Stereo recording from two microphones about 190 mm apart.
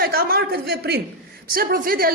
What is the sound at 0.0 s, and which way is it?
A woman's voice, 50° right (ahead or behind).